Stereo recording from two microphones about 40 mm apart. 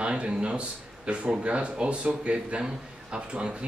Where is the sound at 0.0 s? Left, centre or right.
Right.